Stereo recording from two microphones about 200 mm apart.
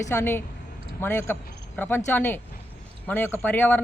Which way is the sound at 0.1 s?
10° left (ahead or behind).